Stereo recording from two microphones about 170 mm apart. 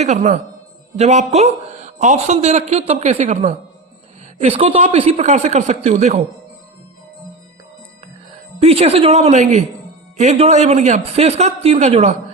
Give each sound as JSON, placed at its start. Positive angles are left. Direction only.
{"t": 0.0, "sound": "a man's voice", "side_deg": -45}
{"t": 8.5, "sound": "a man's voice", "side_deg": -35}